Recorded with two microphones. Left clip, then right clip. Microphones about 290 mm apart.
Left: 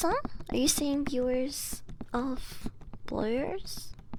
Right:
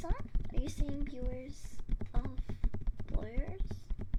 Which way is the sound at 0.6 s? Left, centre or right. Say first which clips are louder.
Left 14 dB; left.